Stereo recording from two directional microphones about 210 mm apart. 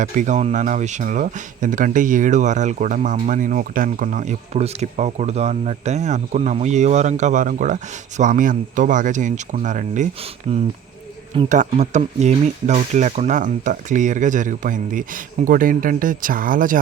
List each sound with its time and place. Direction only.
0.0 s speech: 35° right (ahead or behind)